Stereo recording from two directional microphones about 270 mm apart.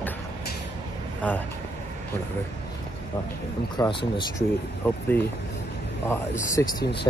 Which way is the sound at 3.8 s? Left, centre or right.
Centre.